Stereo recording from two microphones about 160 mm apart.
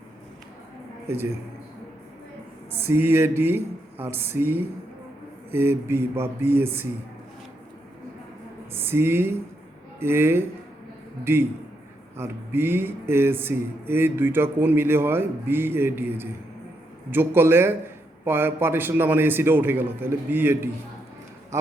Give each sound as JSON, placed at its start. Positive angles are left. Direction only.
{"t": 1.0, "sound": "a man's voice", "side_deg": -15}
{"t": 2.7, "sound": "speech", "side_deg": -15}
{"t": 8.7, "sound": "speech", "side_deg": -15}